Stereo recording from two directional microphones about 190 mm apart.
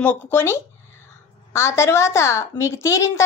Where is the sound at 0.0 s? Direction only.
10° left (ahead or behind).